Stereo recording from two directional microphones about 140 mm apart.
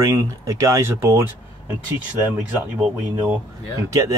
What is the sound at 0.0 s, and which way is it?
Speech, 20° right (ahead or behind).